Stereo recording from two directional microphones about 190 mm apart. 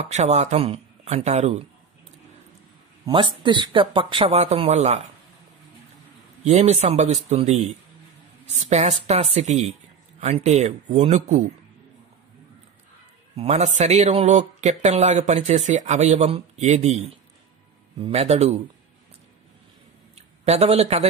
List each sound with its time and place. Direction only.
0.0 s speech: 35° right (ahead or behind)
3.1 s speech: 25° right (ahead or behind)
6.4 s speech: 35° right (ahead or behind)
13.4 s speech: 35° right (ahead or behind)
18.0 s speech: 35° right (ahead or behind)
20.2 s speech: 35° right (ahead or behind)